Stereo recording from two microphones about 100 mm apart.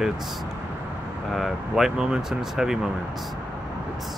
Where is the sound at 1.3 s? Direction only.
Centre (ahead or behind).